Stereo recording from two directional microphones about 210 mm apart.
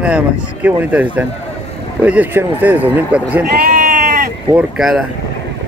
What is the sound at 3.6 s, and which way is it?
Sheep, 40° right (ahead or behind).